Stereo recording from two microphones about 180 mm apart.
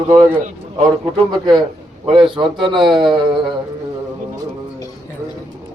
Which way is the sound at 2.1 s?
25° right (ahead or behind).